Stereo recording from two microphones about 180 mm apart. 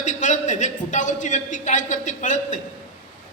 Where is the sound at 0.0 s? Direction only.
45° left (ahead or behind).